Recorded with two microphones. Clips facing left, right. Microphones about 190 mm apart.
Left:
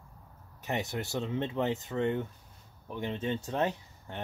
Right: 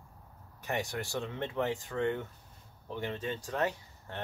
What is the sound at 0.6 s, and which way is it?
Speech, 20° left (ahead or behind).